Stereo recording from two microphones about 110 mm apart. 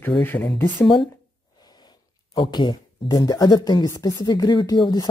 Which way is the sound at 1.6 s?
40° left (ahead or behind).